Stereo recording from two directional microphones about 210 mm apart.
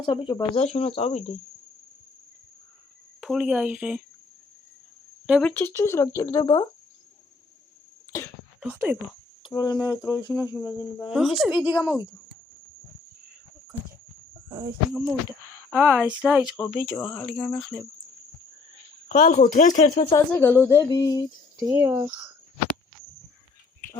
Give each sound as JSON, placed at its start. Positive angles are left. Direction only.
{"t": 0.0, "sound": "speech", "side_deg": 25}
{"t": 3.2, "sound": "speech", "side_deg": -5}
{"t": 5.2, "sound": "speech", "side_deg": 0}
{"t": 8.1, "sound": "speech", "side_deg": 15}
{"t": 8.6, "sound": "speech", "side_deg": -5}
{"t": 9.4, "sound": "speech", "side_deg": 20}
{"t": 10.3, "sound": "speech", "side_deg": -10}
{"t": 14.5, "sound": "speech", "side_deg": -15}
{"t": 16.6, "sound": "speech", "side_deg": 10}
{"t": 19.0, "sound": "speech", "side_deg": 40}
{"t": 20.1, "sound": "speech", "side_deg": 10}
{"t": 21.6, "sound": "speech", "side_deg": -10}